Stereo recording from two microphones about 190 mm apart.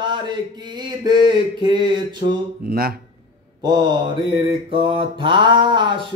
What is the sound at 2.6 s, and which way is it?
Speech, 50° right (ahead or behind).